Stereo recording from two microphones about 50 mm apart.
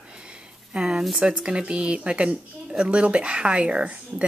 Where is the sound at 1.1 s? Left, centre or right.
Centre.